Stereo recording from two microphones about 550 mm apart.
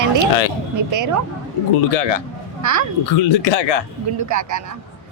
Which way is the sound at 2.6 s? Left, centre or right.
Right.